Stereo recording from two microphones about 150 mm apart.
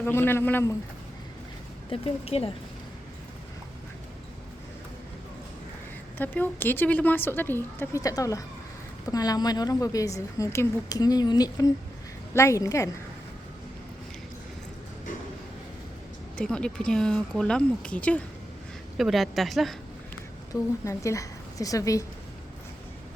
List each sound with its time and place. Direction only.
0.0 s a woman's voice: 15° left (ahead or behind)
1.9 s speech: 40° left (ahead or behind)
6.1 s a woman's voice: 10° left (ahead or behind)
16.4 s speech: 5° left (ahead or behind)
20.5 s a woman's voice: 20° left (ahead or behind)